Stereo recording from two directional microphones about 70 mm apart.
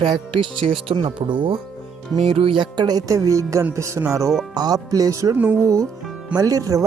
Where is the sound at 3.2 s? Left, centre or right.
Right.